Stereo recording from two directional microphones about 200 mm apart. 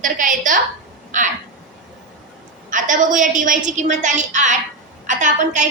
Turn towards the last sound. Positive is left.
turn(degrees=-40)  # may be behind; listen again after turning